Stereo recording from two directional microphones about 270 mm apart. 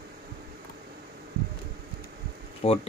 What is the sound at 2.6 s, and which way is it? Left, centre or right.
Speech, left.